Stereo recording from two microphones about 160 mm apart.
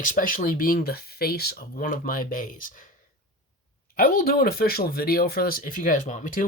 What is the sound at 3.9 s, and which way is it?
Speech, 65° left (ahead or behind).